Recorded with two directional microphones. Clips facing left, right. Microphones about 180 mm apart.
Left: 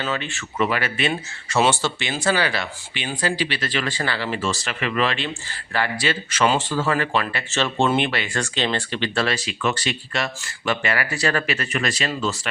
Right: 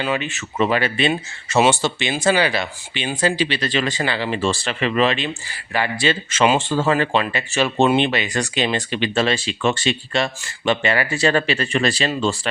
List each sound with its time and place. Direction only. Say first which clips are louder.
0.0 s speech: right 4 dB; 15° right (ahead or behind)
1.5 s speech: right 3 dB; 15° right (ahead or behind)